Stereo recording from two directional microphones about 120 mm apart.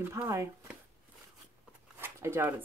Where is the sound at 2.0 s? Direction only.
20° right (ahead or behind).